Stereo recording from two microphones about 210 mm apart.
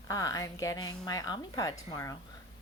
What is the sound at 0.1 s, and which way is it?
Speech, 15° left (ahead or behind).